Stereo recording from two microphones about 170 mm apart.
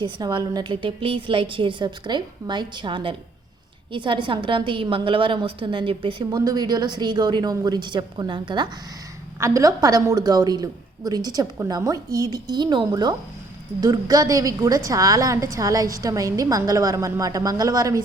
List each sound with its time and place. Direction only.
0.0 s a woman's voice: 25° right (ahead or behind)